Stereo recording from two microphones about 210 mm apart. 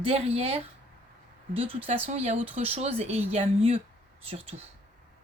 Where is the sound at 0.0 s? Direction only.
30° right (ahead or behind).